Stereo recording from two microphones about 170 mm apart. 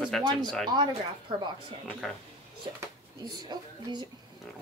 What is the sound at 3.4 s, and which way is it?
Speech, 25° right (ahead or behind).